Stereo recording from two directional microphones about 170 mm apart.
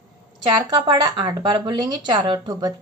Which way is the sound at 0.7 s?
25° right (ahead or behind).